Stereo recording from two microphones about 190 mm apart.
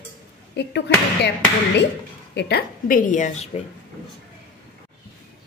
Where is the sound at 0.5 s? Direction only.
65° left (ahead or behind).